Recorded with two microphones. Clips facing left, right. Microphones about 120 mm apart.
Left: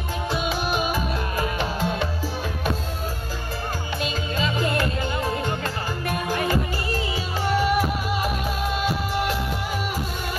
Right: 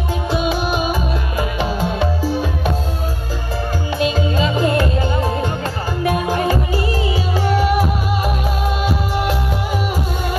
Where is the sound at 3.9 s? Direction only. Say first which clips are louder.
Right 10 dB; centre (ahead or behind).